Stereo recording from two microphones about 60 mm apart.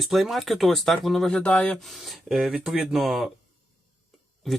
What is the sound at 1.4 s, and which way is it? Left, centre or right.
Speech, centre.